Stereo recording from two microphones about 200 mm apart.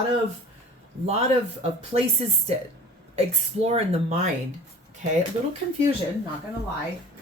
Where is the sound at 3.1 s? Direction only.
30° right (ahead or behind).